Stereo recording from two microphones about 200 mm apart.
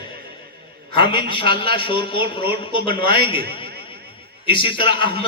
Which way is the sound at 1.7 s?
25° left (ahead or behind).